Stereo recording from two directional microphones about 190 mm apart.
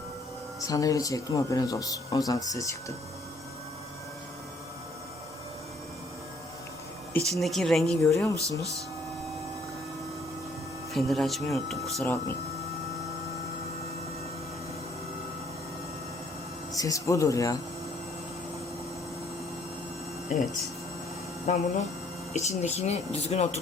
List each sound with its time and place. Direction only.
0.6 s speech: 20° left (ahead or behind)
7.3 s speech: centre (ahead or behind)
8.1 s speech: 15° left (ahead or behind)
8.4 s speech: 15° right (ahead or behind)
10.9 s speech: centre (ahead or behind)
16.7 s speech: 20° left (ahead or behind)
20.3 s speech: 45° left (ahead or behind)
21.5 s speech: 40° left (ahead or behind)